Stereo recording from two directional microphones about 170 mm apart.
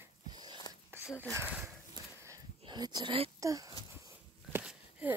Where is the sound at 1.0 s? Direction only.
15° left (ahead or behind).